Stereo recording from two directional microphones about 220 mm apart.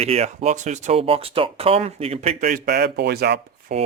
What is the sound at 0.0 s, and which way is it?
Speech, 25° right (ahead or behind).